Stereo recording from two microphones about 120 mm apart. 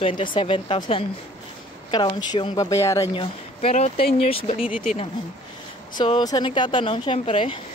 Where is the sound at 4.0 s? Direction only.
55° left (ahead or behind).